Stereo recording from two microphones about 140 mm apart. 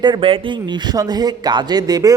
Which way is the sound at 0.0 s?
35° right (ahead or behind).